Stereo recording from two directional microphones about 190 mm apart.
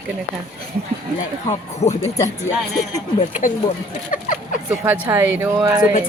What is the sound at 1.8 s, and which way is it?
A woman's voice, 35° left (ahead or behind).